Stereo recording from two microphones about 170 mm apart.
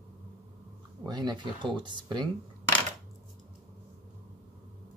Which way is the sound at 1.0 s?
25° right (ahead or behind).